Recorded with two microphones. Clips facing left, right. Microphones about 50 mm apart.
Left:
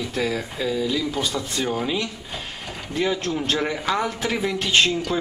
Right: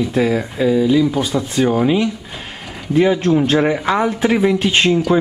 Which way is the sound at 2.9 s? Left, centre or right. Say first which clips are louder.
Right 10 dB; right.